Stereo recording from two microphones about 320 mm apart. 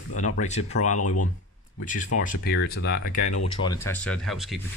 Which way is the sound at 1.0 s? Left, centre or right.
Left.